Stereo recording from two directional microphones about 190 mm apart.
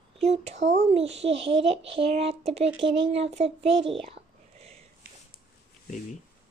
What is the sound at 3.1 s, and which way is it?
Speech, 35° right (ahead or behind).